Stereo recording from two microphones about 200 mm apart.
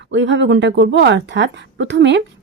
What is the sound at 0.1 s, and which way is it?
Speech, 65° right (ahead or behind).